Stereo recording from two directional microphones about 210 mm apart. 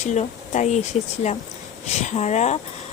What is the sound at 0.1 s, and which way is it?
Speech, 35° left (ahead or behind).